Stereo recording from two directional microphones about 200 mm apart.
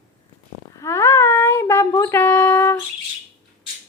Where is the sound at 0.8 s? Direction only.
15° left (ahead or behind).